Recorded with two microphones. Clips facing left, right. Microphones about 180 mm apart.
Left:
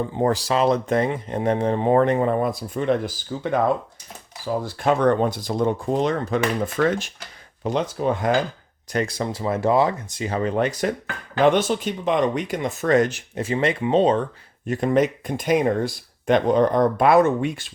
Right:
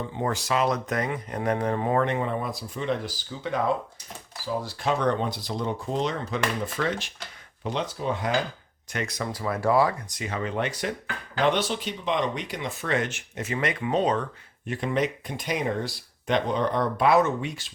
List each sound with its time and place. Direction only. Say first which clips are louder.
0.2 s speech: left 5 dB; 35° left (ahead or behind)
4.6 s speech: left 7 dB; 50° left (ahead or behind)
8.9 s speech: left 6 dB; 30° left (ahead or behind)
14.7 s speech: left 7 dB; 45° left (ahead or behind)